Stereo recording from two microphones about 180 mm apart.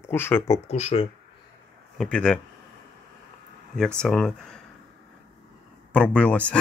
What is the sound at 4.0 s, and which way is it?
Speech, 5° left (ahead or behind).